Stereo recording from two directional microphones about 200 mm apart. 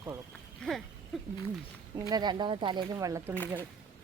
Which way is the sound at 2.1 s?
20° right (ahead or behind).